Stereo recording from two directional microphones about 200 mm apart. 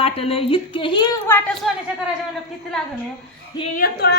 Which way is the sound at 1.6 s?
Centre (ahead or behind).